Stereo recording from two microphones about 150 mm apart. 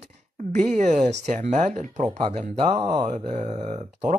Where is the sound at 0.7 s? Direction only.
55° right (ahead or behind).